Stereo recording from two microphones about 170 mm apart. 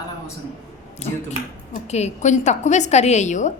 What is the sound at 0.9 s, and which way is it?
A woman's voice, 40° left (ahead or behind).